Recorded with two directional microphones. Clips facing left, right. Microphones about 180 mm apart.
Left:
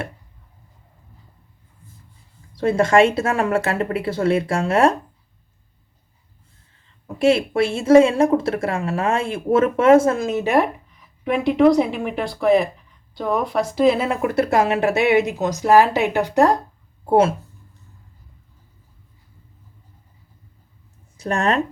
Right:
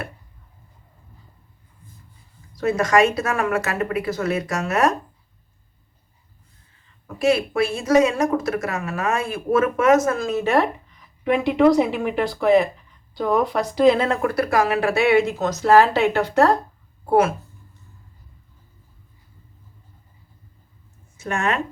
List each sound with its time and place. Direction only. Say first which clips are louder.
2.6 s speech: left 3 dB; 30° left (ahead or behind)
7.2 s speech: left 2 dB; 25° left (ahead or behind)
11.0 s speech: even; centre (ahead or behind)
14.3 s speech: left 5 dB; 25° left (ahead or behind)
17.1 s speech: left 2 dB; 30° left (ahead or behind)
21.2 s speech: left 3 dB; 35° left (ahead or behind)